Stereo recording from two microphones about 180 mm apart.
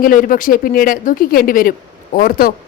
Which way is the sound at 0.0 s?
50° left (ahead or behind).